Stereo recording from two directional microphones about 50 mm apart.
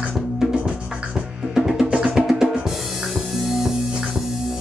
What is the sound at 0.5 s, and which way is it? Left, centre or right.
Music, right.